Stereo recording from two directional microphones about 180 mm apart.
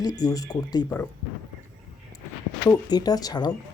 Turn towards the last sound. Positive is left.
turn(degrees=20)  # may be behind; listen again after turning